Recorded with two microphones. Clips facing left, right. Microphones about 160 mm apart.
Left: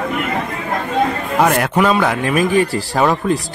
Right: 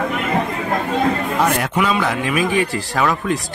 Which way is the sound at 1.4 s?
50° left (ahead or behind).